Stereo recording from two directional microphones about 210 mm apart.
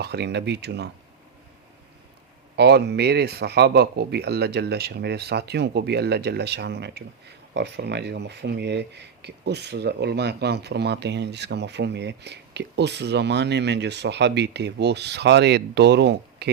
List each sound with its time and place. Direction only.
0.0 s speech: 50° right (ahead or behind)
2.6 s speech: 50° right (ahead or behind)